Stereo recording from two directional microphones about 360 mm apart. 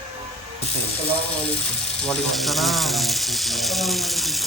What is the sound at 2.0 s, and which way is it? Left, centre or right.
Speech, centre.